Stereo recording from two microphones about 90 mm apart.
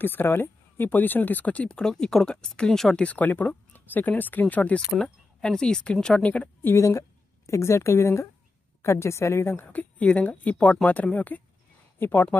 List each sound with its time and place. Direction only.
0.0 s speech: 20° left (ahead or behind)
6.7 s a woman's voice: 30° left (ahead or behind)
9.7 s speech: 15° left (ahead or behind)